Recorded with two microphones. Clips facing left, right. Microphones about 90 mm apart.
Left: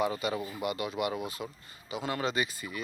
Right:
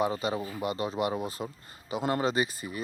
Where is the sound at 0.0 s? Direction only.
35° right (ahead or behind).